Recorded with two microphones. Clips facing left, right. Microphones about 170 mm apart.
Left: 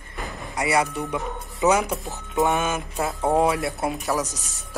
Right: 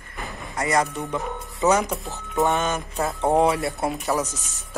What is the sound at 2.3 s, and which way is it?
Speech, centre (ahead or behind).